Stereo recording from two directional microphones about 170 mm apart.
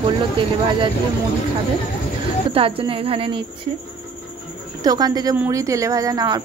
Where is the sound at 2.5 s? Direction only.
35° right (ahead or behind).